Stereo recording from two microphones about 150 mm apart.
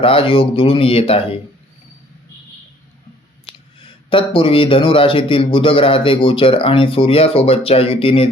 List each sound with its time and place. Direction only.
0.0 s speech: 40° left (ahead or behind)
4.1 s speech: 35° left (ahead or behind)